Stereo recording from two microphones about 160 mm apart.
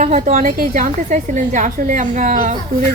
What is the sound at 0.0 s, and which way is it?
A woman's voice, 45° right (ahead or behind).